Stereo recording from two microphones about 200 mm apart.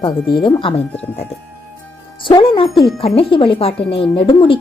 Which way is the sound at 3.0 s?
30° left (ahead or behind).